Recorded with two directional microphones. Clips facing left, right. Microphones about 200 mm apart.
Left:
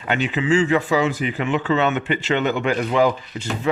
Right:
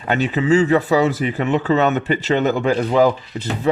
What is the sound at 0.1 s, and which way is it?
Speech, 40° right (ahead or behind).